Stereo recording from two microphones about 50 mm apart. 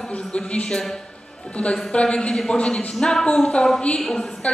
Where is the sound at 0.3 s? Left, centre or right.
Left.